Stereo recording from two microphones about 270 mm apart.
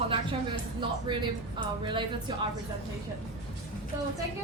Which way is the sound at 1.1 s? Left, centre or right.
Centre.